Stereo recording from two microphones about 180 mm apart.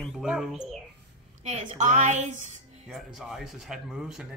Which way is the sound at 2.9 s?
Centre (ahead or behind).